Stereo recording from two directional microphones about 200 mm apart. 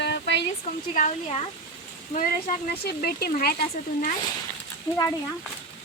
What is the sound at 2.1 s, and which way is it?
Speech, 40° left (ahead or behind).